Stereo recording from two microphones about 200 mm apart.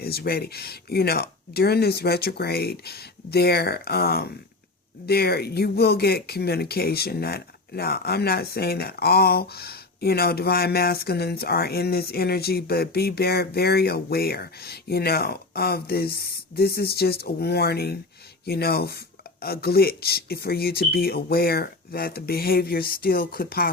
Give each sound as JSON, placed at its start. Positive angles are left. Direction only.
{"t": 0.0, "sound": "speech", "side_deg": 50}